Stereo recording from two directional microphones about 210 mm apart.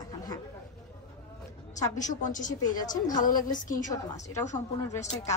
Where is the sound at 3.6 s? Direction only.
40° left (ahead or behind).